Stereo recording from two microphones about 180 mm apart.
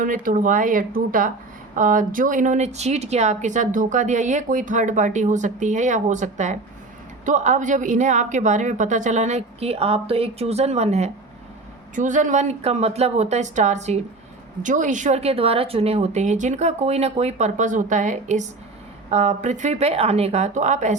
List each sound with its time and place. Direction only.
0.0 s a woman's voice: 50° right (ahead or behind)